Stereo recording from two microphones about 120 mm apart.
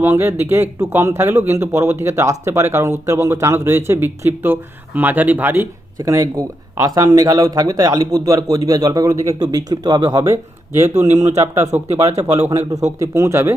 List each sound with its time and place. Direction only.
0.0 s a man's voice: 20° right (ahead or behind)
6.0 s a man's voice: 30° right (ahead or behind)
10.2 s a man's voice: 20° right (ahead or behind)